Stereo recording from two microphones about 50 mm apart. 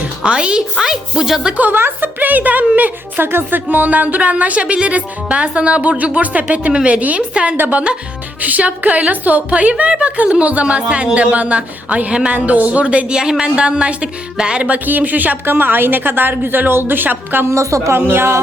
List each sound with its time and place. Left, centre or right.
0.2 s a woman's voice: centre
0.9 s a woman's voice: centre
1.7 s a woman's voice: right
3.2 s speech: right; by 14.7 s centre
14.7 s a woman's voice: right
15.4 s a woman's voice: right
17.5 s a woman's voice: right
17.9 s a woman's voice: right